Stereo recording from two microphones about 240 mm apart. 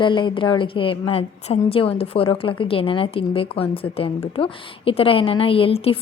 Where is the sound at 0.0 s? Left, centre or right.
Centre.